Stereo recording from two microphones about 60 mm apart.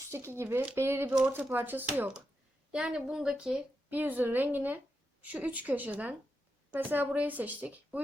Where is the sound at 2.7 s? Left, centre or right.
Centre.